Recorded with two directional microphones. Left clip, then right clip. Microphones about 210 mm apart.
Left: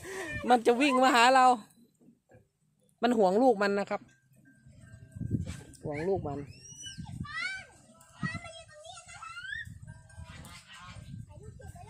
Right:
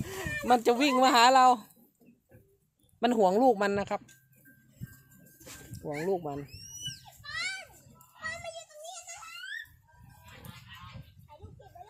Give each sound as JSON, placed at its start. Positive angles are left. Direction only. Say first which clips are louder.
{"t": 0.0, "sound": "a sound", "louder": "right 1 dB", "side_deg": 0}
{"t": 0.4, "sound": "speech", "louder": "even", "side_deg": 0}
{"t": 3.0, "sound": "speech", "louder": "right 1 dB", "side_deg": 0}
{"t": 5.8, "sound": "speech", "louder": "even", "side_deg": 0}
{"t": 6.9, "sound": "children playing", "louder": "right 1 dB", "side_deg": -50}
{"t": 8.3, "sound": "a sound", "louder": "right 3 dB", "side_deg": -50}
{"t": 10.2, "sound": "pig", "louder": "even", "side_deg": 45}